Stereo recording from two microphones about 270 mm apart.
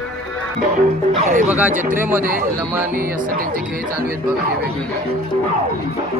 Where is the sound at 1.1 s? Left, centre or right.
Right.